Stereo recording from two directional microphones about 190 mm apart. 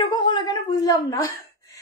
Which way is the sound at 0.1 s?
20° left (ahead or behind).